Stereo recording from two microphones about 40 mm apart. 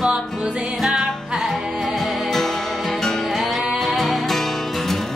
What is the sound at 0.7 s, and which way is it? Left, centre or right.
Music, centre.